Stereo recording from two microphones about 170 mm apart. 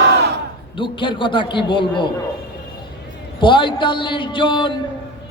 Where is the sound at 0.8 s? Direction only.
30° left (ahead or behind).